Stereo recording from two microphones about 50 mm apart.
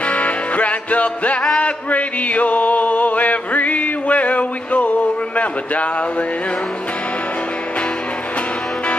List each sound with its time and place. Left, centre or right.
0.0 s music: left